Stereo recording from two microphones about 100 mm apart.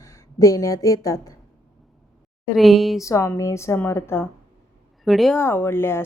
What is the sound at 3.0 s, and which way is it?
A woman's voice, 30° left (ahead or behind).